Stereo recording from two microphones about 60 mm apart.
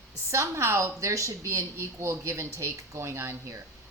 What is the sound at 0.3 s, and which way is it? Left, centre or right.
A woman's voice, right.